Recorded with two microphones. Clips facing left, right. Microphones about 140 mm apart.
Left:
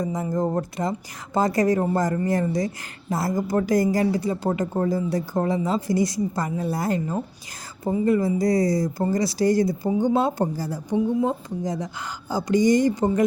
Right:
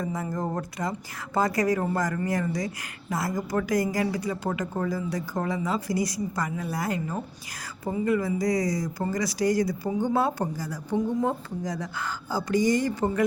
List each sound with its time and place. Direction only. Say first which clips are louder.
0.0 s a woman's voice: left 5 dB; 20° left (ahead or behind)
10.8 s a woman's voice: left 3 dB; 15° left (ahead or behind)